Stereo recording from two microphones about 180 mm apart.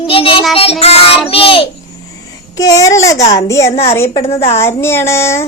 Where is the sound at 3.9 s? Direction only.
15° left (ahead or behind).